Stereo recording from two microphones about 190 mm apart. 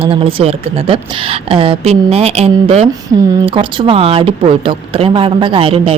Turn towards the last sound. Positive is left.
turn(degrees=-30)  # may be behind; listen again after turning